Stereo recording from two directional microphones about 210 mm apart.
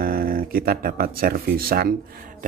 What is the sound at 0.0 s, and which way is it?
Speech, 45° right (ahead or behind).